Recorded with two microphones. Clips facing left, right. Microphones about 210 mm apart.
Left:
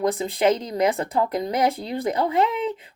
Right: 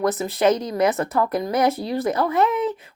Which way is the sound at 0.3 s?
15° left (ahead or behind).